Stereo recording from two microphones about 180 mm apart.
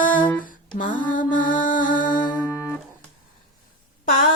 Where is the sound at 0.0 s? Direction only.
45° left (ahead or behind).